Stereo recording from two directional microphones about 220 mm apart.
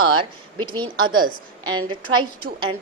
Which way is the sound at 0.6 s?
20° right (ahead or behind).